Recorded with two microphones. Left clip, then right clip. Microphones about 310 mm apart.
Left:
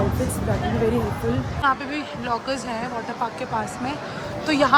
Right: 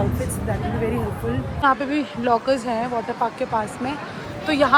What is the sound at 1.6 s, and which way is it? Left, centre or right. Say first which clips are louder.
Speech: right 4 dB; centre.